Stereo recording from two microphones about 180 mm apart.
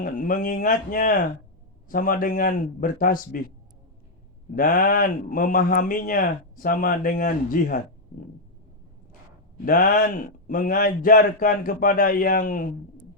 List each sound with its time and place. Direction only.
0.0 s speech: 50° left (ahead or behind)
4.5 s speech: 50° left (ahead or behind)
9.6 s speech: 50° left (ahead or behind)